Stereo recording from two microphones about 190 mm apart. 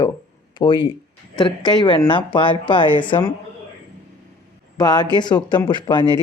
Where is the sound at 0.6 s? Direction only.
25° left (ahead or behind).